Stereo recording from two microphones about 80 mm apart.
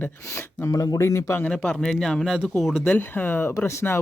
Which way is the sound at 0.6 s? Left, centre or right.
Left.